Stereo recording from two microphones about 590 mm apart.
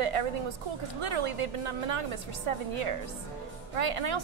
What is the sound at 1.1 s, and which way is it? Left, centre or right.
A woman's voice, right.